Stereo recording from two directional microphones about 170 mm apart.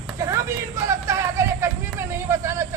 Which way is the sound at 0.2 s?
15° right (ahead or behind).